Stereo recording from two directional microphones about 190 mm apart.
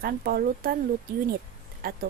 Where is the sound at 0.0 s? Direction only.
50° right (ahead or behind).